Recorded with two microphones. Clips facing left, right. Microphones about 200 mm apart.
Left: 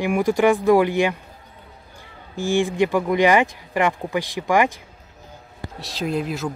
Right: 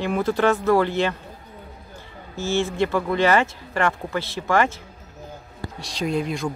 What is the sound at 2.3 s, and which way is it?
Speech, 15° left (ahead or behind).